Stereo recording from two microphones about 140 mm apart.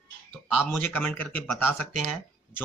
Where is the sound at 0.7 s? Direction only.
10° left (ahead or behind).